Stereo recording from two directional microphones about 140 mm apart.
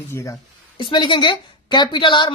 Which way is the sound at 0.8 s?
35° left (ahead or behind).